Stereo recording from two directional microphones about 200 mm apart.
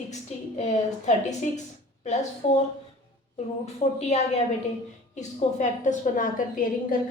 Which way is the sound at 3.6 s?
35° left (ahead or behind).